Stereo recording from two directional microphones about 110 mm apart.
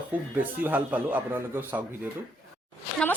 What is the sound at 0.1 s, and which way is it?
A man's voice, 15° right (ahead or behind).